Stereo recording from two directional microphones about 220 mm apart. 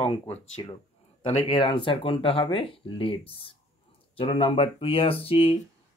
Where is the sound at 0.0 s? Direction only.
25° left (ahead or behind).